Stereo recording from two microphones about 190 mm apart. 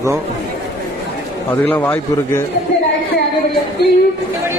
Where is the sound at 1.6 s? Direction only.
10° left (ahead or behind).